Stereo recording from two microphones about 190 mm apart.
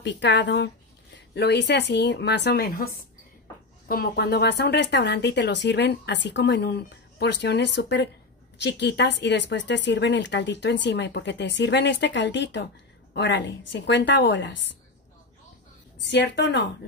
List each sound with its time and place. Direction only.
0.0 s speech: 65° left (ahead or behind)
16.0 s speech: 65° left (ahead or behind)